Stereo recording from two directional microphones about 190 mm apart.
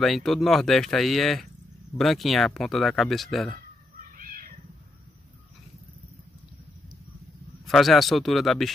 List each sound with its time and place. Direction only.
0.0 s speech: centre (ahead or behind)
4.2 s cat: 45° right (ahead or behind)
7.6 s speech: centre (ahead or behind)